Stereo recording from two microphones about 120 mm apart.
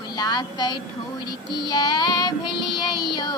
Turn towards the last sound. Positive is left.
turn(degrees=35)  # may be behind; listen again after turning